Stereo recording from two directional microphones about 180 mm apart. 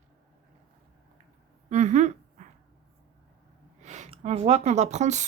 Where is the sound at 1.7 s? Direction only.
40° right (ahead or behind).